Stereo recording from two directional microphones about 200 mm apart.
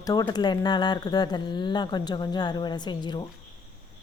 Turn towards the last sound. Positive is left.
turn(degrees=20)  # may be behind; listen again after turning